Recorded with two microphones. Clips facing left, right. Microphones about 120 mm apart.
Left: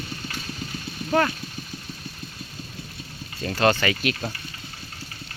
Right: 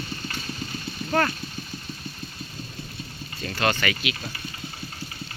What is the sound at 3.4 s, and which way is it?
Speech, 35° left (ahead or behind).